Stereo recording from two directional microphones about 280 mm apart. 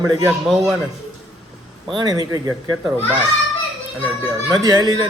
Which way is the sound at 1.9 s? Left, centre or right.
Centre.